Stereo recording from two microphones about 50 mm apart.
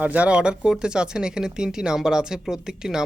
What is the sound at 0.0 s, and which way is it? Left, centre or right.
Speech, right.